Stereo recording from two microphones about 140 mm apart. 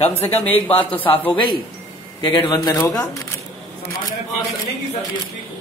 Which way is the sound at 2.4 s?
30° left (ahead or behind).